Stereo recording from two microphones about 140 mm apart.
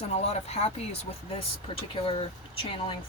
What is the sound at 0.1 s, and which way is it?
Speech, 50° left (ahead or behind).